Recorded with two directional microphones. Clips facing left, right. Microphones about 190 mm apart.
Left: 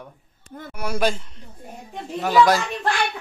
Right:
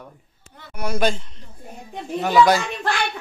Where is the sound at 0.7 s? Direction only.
10° left (ahead or behind).